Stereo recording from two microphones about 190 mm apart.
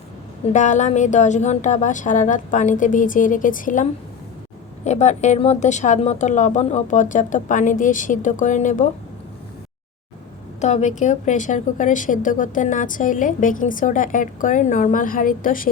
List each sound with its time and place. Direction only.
0.5 s speech: 40° left (ahead or behind)
10.6 s a woman's voice: 35° left (ahead or behind)